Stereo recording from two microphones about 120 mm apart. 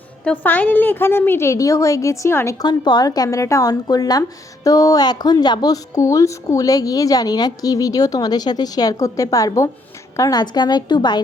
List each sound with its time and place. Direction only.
0.3 s a woman's voice: 15° left (ahead or behind); by 11.2 s 40° left (ahead or behind)